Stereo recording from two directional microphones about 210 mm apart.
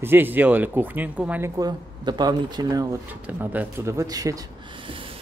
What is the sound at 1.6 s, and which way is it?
Speech, 20° right (ahead or behind).